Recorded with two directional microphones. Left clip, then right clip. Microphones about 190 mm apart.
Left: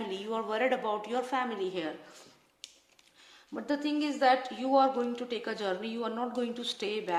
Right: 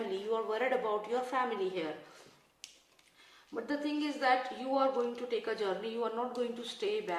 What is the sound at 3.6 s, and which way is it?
A woman's voice, 55° left (ahead or behind).